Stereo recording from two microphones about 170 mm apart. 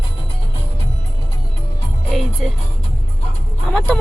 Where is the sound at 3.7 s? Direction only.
5° left (ahead or behind).